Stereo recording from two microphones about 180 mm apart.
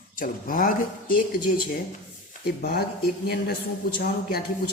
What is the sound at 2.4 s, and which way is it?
Speech, 55° left (ahead or behind).